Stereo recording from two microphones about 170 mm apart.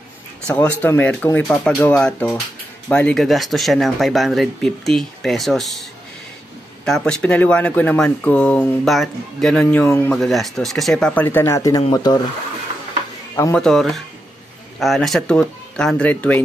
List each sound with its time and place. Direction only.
0.5 s speech: 10° left (ahead or behind); by 12.2 s 25° left (ahead or behind)
13.6 s speech: centre (ahead or behind)